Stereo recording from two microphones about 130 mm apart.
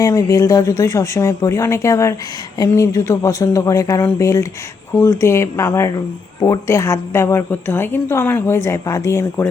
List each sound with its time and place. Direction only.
0.0 s a woman's voice: 25° left (ahead or behind)